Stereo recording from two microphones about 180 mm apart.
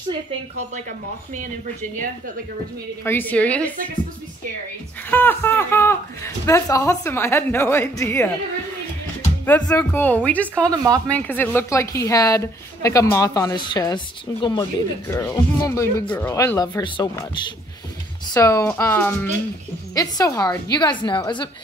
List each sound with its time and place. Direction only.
3.1 s a woman's voice: 10° left (ahead or behind)
5.1 s a woman's voice: 10° left (ahead or behind)
9.7 s a woman's voice: 10° left (ahead or behind)
10.7 s speech: 20° right (ahead or behind)
11.1 s a woman's voice: 10° left (ahead or behind); by 17.2 s 25° left (ahead or behind)
18.3 s a woman's voice: 20° left (ahead or behind)